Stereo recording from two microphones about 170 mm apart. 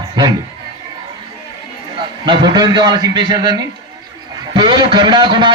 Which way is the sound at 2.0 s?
25° right (ahead or behind).